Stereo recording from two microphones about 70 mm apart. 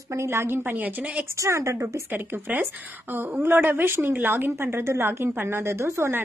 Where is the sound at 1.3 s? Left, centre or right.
Right.